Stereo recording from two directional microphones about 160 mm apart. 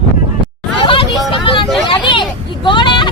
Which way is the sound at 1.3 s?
30° left (ahead or behind).